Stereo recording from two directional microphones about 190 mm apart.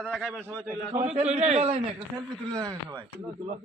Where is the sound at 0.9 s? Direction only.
35° right (ahead or behind).